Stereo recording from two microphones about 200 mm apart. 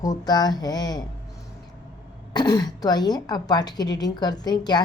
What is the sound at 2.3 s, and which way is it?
A woman's voice, 20° left (ahead or behind).